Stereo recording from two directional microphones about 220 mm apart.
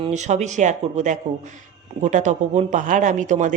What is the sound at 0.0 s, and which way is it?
Speech, 30° right (ahead or behind).